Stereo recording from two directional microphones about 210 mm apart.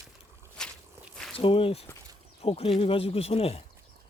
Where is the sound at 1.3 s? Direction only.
25° left (ahead or behind).